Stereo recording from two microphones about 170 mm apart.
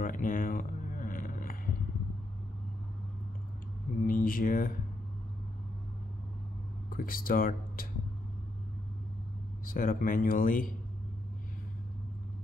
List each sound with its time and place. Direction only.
0.0 s a sound: 50° left (ahead or behind)
4.0 s speech: 55° left (ahead or behind)
6.9 s speech: 55° left (ahead or behind)
9.7 s speech: 55° left (ahead or behind)